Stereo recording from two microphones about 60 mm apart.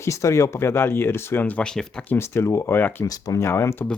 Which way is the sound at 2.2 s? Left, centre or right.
Left.